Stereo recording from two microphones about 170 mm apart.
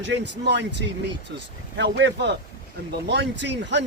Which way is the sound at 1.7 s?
90° right.